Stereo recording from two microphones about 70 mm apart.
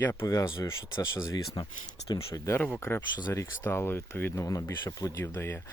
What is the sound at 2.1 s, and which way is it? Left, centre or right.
Speech, left.